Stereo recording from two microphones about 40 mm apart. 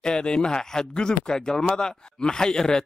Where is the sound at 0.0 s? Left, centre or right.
Left.